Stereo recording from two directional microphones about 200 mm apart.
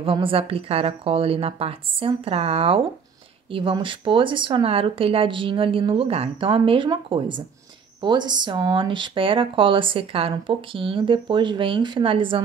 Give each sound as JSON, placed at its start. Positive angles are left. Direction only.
{"t": 0.0, "sound": "speech", "side_deg": -25}